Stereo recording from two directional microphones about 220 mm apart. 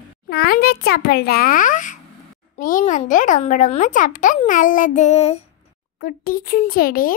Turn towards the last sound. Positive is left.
turn(degrees=40)  # may be behind; listen again after turning